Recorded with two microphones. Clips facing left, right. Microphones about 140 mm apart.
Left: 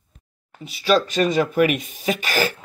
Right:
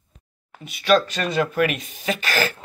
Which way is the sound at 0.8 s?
10° left (ahead or behind).